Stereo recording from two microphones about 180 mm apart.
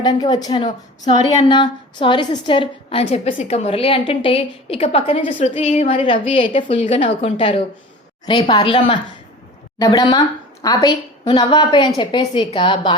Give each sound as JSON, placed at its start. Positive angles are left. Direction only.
{"t": 0.0, "sound": "a woman's voice", "side_deg": 25}
{"t": 1.0, "sound": "a woman's voice", "side_deg": 35}